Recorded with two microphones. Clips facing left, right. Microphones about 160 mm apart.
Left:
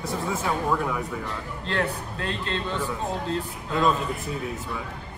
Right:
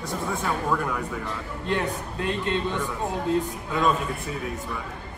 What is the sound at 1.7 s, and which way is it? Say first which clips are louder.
A man's voice: right 1 dB; 15° right (ahead or behind).